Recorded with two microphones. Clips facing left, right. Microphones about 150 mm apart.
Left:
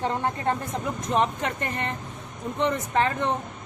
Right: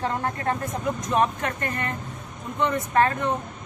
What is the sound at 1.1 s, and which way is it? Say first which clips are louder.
Speech: even; 20° left (ahead or behind).